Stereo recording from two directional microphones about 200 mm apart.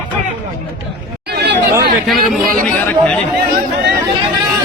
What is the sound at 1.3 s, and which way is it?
Chatter, 55° right (ahead or behind).